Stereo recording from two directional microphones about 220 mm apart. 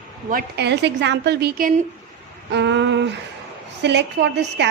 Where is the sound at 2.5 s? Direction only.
55° right (ahead or behind).